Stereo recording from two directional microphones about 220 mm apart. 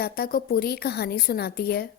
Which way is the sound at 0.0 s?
45° left (ahead or behind).